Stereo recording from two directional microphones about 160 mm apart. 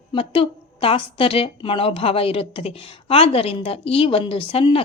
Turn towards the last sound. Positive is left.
turn(degrees=35)  # may be behind; listen again after turning